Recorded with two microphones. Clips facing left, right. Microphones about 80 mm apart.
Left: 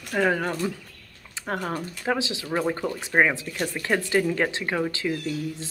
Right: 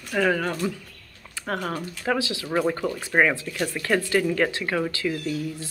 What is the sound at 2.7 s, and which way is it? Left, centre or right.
Speech, left.